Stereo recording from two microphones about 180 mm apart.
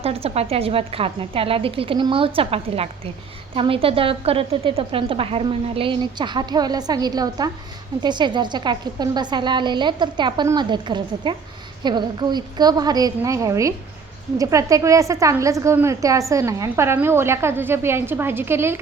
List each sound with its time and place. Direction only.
0.0 s a woman's voice: 35° right (ahead or behind); by 18.8 s 15° right (ahead or behind)